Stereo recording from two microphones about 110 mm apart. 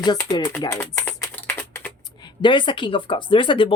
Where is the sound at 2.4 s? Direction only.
45° left (ahead or behind).